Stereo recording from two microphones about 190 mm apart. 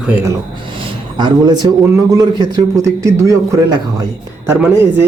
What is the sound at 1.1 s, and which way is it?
A man's voice, 25° right (ahead or behind).